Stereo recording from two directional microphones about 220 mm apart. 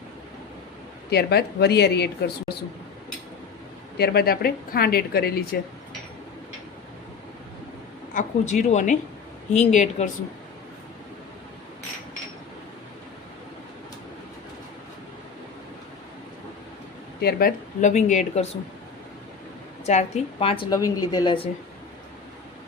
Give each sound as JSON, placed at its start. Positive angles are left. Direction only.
{"t": 1.1, "sound": "speech", "side_deg": 45}
{"t": 3.9, "sound": "speech", "side_deg": 45}
{"t": 8.1, "sound": "speech", "side_deg": 35}
{"t": 17.2, "sound": "speech", "side_deg": 45}
{"t": 19.8, "sound": "a woman's voice", "side_deg": 30}